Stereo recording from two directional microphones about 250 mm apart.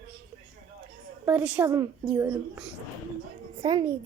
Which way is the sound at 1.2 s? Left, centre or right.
Centre.